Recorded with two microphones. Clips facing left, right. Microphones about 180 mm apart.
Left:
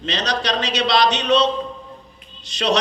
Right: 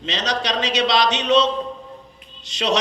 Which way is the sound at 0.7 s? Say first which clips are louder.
Left 1 dB; 20° right (ahead or behind).